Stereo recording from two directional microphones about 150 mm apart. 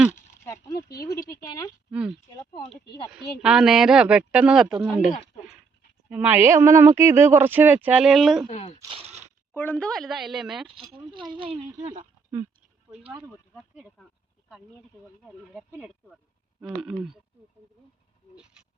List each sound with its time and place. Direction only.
0.4 s a sound: 25° left (ahead or behind)
0.9 s speech: 20° left (ahead or behind)
1.9 s speech: 5° right (ahead or behind)
2.5 s a sound: 35° left (ahead or behind)
3.1 s speech: 5° right (ahead or behind)
6.1 s speech: 10° right (ahead or behind)
8.4 s speech: 45° left (ahead or behind)
8.9 s a sound: 40° right (ahead or behind)
9.6 s speech: 10° left (ahead or behind)
11.1 s speech: 30° right (ahead or behind)
12.9 s speech: 40° right (ahead or behind)
13.6 s speech: 10° right (ahead or behind)
15.2 s speech: 5° right (ahead or behind)